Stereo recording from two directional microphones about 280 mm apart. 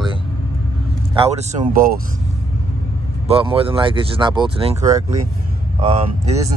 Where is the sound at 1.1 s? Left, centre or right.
Centre.